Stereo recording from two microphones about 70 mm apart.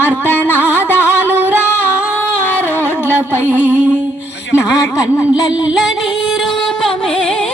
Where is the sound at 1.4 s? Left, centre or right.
Right.